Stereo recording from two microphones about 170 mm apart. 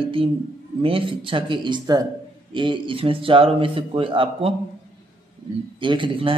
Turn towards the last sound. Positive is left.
turn(degrees=-30)  # may be behind; listen again after turning